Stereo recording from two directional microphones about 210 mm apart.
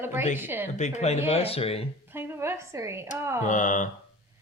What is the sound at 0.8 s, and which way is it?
Speech, 35° left (ahead or behind).